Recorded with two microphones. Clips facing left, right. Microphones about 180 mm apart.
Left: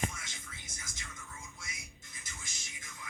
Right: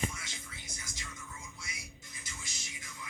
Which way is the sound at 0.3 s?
50° left (ahead or behind).